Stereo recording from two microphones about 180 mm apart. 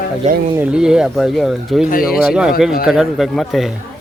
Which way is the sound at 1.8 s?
50° left (ahead or behind).